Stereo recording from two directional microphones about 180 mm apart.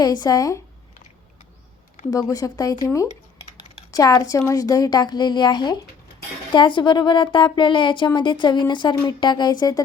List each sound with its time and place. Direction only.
0.0 s a woman's voice: 20° left (ahead or behind)
2.0 s a woman's voice: 20° left (ahead or behind)